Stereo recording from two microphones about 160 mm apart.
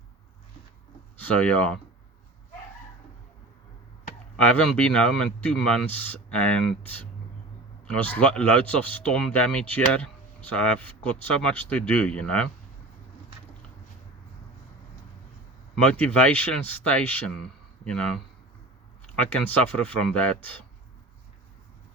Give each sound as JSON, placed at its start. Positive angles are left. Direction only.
{"t": 1.2, "sound": "speech", "side_deg": 10}
{"t": 4.5, "sound": "speech", "side_deg": 5}
{"t": 15.7, "sound": "speech", "side_deg": 10}